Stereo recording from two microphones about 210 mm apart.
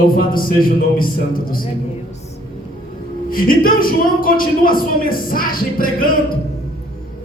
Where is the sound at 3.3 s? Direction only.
45° left (ahead or behind).